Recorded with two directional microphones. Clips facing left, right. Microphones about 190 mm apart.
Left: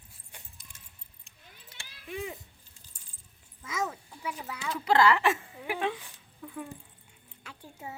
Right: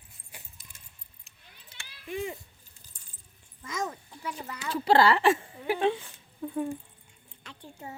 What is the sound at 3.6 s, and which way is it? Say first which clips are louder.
A child's voice: even; 5° left (ahead or behind).